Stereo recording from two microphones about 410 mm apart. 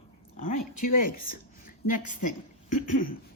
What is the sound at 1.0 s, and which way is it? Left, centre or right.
A woman's voice, centre.